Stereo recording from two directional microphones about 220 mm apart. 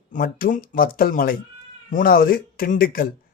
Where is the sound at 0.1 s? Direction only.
40° left (ahead or behind).